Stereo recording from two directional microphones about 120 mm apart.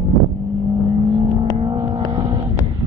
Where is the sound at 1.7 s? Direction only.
35° right (ahead or behind).